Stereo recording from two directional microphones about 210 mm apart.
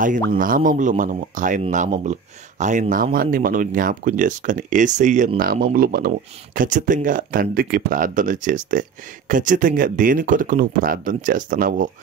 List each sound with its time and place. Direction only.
0.4 s speech: 40° right (ahead or behind)